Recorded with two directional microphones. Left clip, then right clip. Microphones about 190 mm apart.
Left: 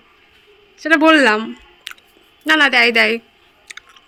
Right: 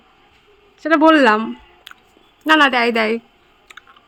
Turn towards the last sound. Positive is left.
turn(degrees=-10)  # may be behind; listen again after turning